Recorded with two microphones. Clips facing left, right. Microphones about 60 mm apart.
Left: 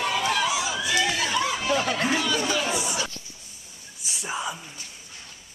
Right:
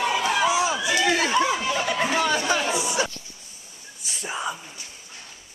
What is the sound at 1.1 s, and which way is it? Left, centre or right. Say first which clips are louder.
Chatter: right 4 dB; right.